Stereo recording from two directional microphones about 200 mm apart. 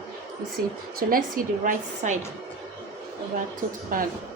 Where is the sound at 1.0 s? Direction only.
45° right (ahead or behind).